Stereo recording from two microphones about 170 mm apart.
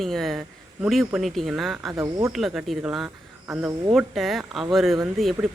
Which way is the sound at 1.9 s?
20° right (ahead or behind).